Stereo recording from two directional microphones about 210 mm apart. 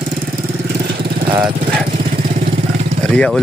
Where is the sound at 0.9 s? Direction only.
45° right (ahead or behind).